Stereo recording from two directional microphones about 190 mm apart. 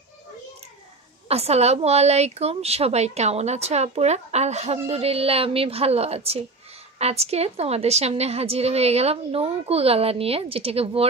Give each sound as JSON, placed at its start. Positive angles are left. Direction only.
{"t": 1.3, "sound": "a woman's voice", "side_deg": -35}